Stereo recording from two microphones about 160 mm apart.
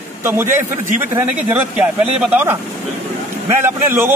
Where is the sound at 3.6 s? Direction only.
15° right (ahead or behind).